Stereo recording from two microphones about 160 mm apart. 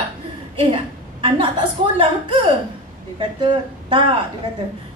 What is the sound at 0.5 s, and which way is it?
A woman's voice, 30° right (ahead or behind).